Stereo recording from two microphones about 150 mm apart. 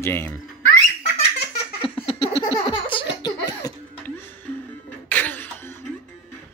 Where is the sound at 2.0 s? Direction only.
40° left (ahead or behind).